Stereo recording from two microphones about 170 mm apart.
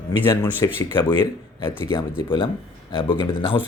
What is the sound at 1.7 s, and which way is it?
Speech, 15° left (ahead or behind).